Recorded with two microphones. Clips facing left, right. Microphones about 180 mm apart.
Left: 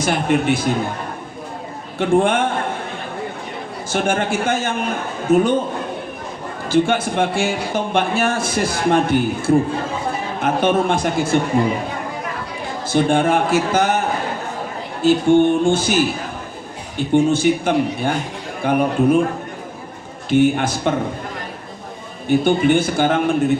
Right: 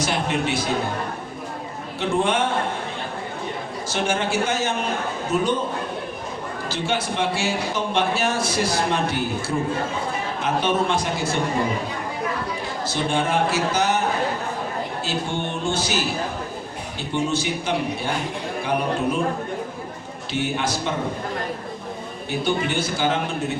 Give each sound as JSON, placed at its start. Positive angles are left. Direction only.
{"t": 0.0, "sound": "speech", "side_deg": 50}
{"t": 2.0, "sound": "speech", "side_deg": 55}
{"t": 3.8, "sound": "speech", "side_deg": 50}
{"t": 6.7, "sound": "speech", "side_deg": 50}
{"t": 10.4, "sound": "speech", "side_deg": 55}
{"t": 12.9, "sound": "speech", "side_deg": 55}
{"t": 15.0, "sound": "speech", "side_deg": 50}
{"t": 20.3, "sound": "speech", "side_deg": 50}
{"t": 22.3, "sound": "speech", "side_deg": 50}